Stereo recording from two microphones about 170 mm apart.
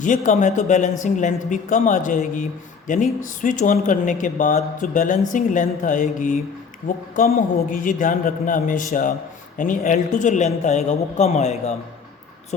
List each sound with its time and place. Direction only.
0.0 s a man's voice: 45° left (ahead or behind)